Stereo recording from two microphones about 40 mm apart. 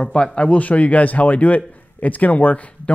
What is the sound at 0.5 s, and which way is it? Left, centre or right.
A man's voice, left.